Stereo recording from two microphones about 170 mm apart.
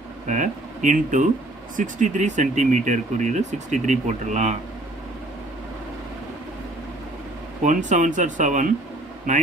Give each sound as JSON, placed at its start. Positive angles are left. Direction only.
{"t": 0.3, "sound": "speech", "side_deg": -45}
{"t": 7.6, "sound": "speech", "side_deg": -45}